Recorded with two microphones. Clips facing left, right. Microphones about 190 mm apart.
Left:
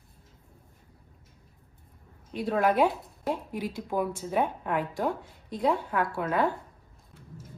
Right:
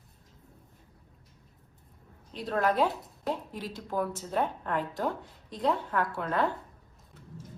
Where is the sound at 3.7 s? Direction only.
10° left (ahead or behind).